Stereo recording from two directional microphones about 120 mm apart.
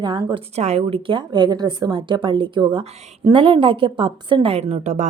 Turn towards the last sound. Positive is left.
turn(degrees=-70)  # may be behind; listen again after turning